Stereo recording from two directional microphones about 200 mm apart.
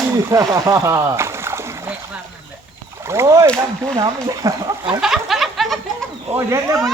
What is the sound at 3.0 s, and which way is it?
Speech, 15° right (ahead or behind).